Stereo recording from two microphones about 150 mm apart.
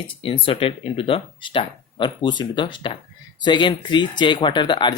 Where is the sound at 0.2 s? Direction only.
35° left (ahead or behind).